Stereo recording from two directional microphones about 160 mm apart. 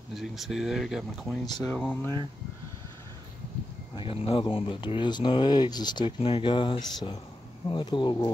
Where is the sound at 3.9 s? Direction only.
35° left (ahead or behind).